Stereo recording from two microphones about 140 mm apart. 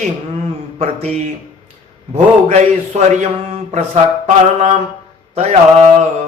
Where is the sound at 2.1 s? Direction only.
55° right (ahead or behind).